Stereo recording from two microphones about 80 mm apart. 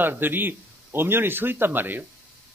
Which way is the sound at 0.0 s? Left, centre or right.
Right.